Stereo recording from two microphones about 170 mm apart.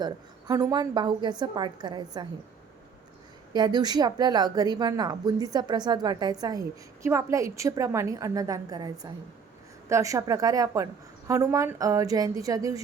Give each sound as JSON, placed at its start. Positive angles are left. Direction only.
{"t": 0.0, "sound": "a woman's voice", "side_deg": -25}
{"t": 3.5, "sound": "a woman's voice", "side_deg": -25}